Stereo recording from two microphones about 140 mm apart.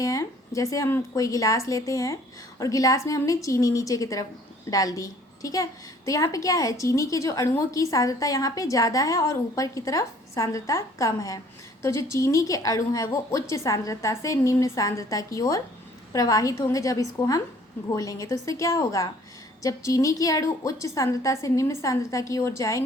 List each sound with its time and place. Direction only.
0.0 s a woman's voice: 25° left (ahead or behind)